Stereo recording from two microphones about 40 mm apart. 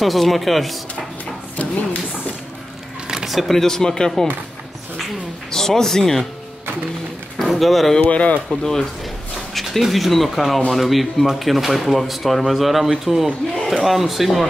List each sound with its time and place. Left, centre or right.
0.0 s speech: centre
1.6 s speech: left
3.3 s speech: centre
3.5 s speech: centre
5.5 s speech: centre
7.4 s speech: centre
8.0 s speech: left
8.5 s speech: centre
9.5 s speech: centre